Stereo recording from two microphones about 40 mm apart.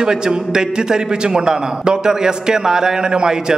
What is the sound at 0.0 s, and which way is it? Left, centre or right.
A man's voice, centre.